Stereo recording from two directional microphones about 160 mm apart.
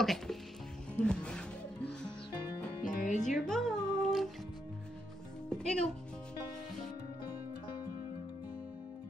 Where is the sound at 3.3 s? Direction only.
5° left (ahead or behind).